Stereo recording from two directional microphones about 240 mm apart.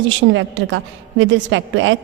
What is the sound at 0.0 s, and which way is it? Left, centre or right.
A woman's voice, right.